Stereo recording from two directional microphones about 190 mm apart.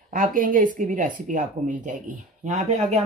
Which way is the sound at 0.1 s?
45° right (ahead or behind).